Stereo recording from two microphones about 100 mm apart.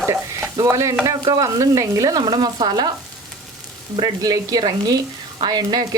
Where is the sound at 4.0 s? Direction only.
40° right (ahead or behind).